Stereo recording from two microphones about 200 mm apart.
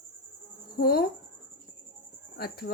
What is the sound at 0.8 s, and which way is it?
Speech, 50° left (ahead or behind).